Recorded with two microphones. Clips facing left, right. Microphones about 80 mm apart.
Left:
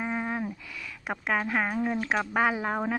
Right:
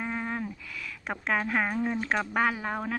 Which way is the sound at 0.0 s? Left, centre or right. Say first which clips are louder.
Left 2 dB; centre.